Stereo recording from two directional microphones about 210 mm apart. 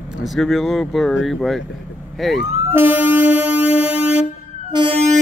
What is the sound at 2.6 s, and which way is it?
Train, 10° right (ahead or behind).